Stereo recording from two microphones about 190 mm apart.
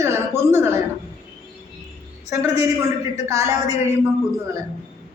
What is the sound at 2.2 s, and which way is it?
A woman's voice, 15° right (ahead or behind).